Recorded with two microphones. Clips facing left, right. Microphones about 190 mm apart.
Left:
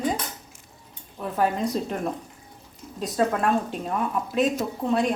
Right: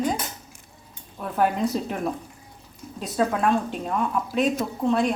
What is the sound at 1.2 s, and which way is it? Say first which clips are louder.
Speech: right 1 dB; centre (ahead or behind).